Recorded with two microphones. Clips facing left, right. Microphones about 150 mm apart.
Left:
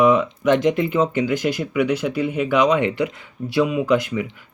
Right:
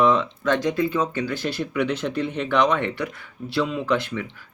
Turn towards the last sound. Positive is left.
turn(degrees=10)  # may be behind; listen again after turning